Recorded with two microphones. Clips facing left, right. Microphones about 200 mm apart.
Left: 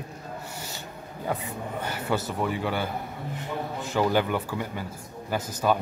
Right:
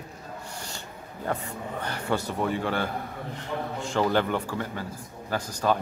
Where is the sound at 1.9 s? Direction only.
5° left (ahead or behind).